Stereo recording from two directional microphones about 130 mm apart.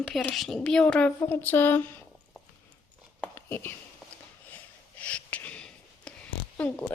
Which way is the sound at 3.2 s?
15° left (ahead or behind).